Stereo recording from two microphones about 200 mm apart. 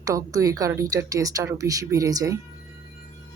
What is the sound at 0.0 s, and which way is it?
Speech, 15° right (ahead or behind).